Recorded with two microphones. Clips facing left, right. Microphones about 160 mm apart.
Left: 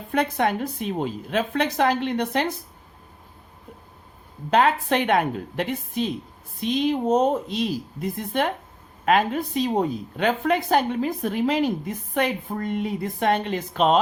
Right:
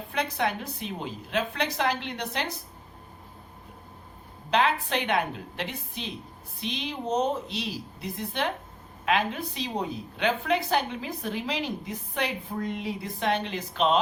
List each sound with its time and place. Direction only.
0.1 s a woman's voice: 50° left (ahead or behind)
4.5 s a woman's voice: 50° left (ahead or behind)